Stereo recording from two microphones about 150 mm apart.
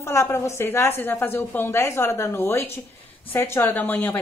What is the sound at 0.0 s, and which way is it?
A woman's voice, 20° left (ahead or behind).